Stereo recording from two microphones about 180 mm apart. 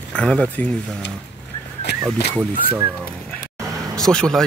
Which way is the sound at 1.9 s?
70° left (ahead or behind).